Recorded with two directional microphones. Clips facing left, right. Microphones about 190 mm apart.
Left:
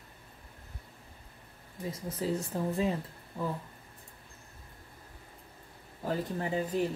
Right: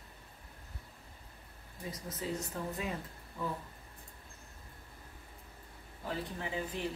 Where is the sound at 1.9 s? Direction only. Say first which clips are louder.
Left 6 dB; 30° left (ahead or behind).